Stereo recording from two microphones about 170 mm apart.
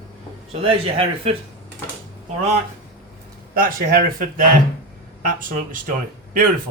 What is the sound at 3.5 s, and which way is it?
Speech, 60° right (ahead or behind).